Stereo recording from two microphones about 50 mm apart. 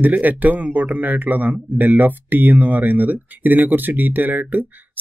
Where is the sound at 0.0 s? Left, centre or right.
Right.